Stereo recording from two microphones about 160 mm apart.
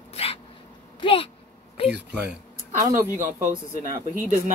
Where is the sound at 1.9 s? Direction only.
5° right (ahead or behind).